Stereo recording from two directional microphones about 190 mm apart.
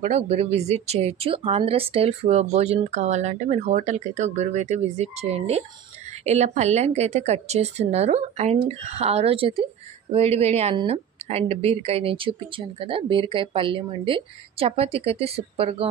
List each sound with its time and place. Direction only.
0.0 s a woman's voice: 35° right (ahead or behind)